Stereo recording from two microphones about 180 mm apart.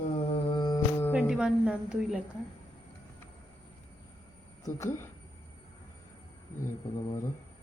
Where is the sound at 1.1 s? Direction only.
5° right (ahead or behind).